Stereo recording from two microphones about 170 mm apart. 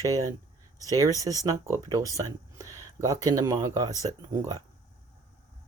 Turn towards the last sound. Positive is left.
turn(degrees=-20)  # may be behind; listen again after turning